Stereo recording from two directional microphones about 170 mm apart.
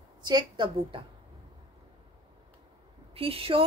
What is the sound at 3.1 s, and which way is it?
Speech, 35° right (ahead or behind).